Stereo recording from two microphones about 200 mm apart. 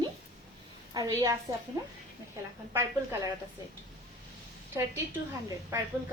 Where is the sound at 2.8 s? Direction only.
10° right (ahead or behind).